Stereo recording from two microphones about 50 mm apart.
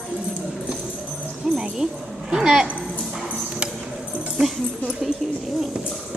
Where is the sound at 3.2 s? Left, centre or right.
Right.